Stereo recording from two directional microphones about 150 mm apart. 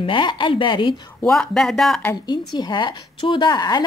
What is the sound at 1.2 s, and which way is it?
Speech, 5° left (ahead or behind).